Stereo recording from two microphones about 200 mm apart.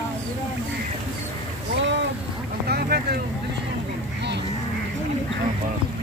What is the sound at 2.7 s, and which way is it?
Speech, 50° right (ahead or behind).